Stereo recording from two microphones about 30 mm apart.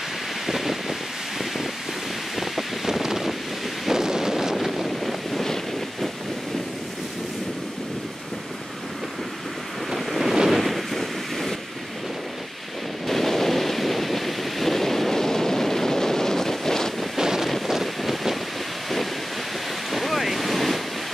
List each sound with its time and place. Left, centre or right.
0.5 s a sound: centre
2.3 s wind: centre
3.9 s wind noise: centre
4.6 s wind noise: centre
5.4 s wind noise: centre
9.9 s wind noise: centre
10.5 s a sound: centre
13.0 s waves: centre
17.2 s wind noise: centre
17.6 s wind: centre
19.9 s waves: centre